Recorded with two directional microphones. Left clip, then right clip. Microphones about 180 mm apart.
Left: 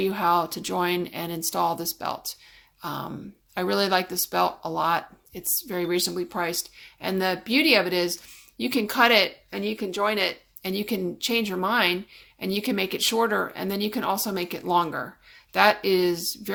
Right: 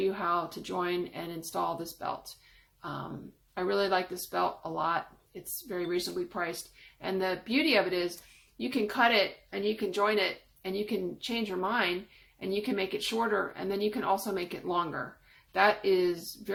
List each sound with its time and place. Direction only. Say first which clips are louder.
0.0 s speech: left 7 dB; 30° left (ahead or behind)